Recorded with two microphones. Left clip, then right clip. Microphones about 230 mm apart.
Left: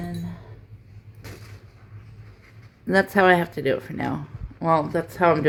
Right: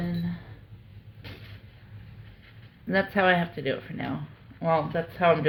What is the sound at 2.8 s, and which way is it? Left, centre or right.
Speech, left.